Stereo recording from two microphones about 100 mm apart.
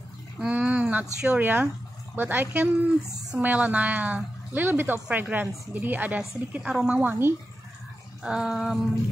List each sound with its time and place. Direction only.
0.4 s a woman's voice: 10° right (ahead or behind)
6.7 s female singing: 5° right (ahead or behind)
7.0 s speech: 20° right (ahead or behind)
8.2 s female singing: 5° right (ahead or behind)